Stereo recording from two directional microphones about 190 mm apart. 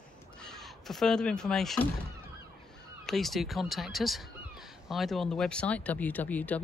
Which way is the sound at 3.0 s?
Centre (ahead or behind).